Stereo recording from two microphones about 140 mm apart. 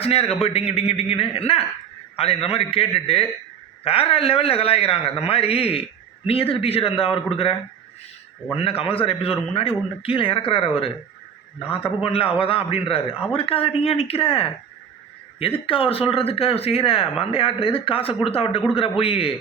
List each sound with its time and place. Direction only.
0.0 s speech: 45° left (ahead or behind)
8.5 s a man's voice: 40° left (ahead or behind)